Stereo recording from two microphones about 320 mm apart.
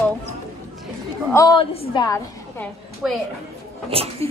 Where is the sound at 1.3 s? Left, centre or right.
Centre.